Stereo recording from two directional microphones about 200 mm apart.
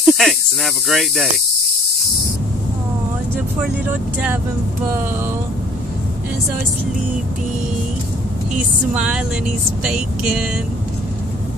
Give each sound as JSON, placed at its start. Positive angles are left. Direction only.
{"t": 0.0, "sound": "speech", "side_deg": 0}
{"t": 8.5, "sound": "speech", "side_deg": -5}